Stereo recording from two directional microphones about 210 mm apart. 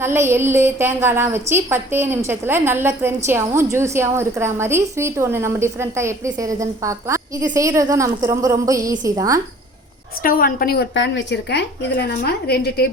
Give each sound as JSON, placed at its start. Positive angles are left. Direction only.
{"t": 0.0, "sound": "a woman's voice", "side_deg": -10}
{"t": 10.2, "sound": "a woman's voice", "side_deg": 45}